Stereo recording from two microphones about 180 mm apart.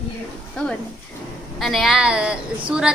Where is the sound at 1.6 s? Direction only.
Centre (ahead or behind).